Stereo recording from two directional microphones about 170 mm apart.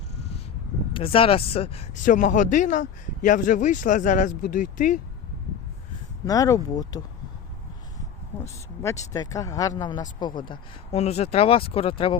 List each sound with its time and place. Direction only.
0.9 s speech: 30° left (ahead or behind)
2.0 s speech: 50° left (ahead or behind)
6.2 s speech: 20° left (ahead or behind)
8.4 s speech: 15° left (ahead or behind); by 12.1 s 30° left (ahead or behind)